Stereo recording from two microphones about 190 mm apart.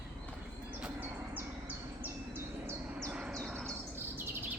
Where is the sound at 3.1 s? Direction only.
Centre (ahead or behind).